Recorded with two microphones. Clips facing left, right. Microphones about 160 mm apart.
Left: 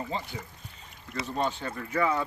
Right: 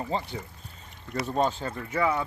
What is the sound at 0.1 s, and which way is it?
Speech, 35° right (ahead or behind).